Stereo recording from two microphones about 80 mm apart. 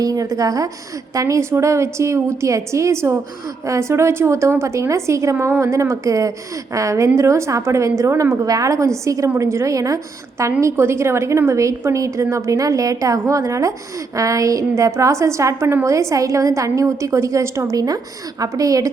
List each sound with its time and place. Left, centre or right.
0.0 s a woman's voice: right